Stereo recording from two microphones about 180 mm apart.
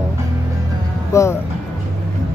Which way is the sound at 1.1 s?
15° left (ahead or behind).